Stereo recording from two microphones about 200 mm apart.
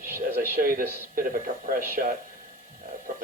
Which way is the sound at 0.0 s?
45° right (ahead or behind).